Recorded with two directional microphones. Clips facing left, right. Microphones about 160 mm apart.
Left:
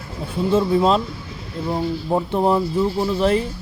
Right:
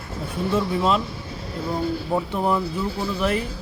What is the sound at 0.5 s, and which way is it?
Speech, 30° left (ahead or behind).